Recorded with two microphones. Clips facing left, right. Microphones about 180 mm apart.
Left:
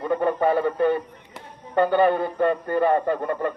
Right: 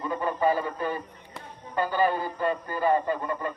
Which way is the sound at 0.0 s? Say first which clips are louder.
Left 5 dB; 65° left (ahead or behind).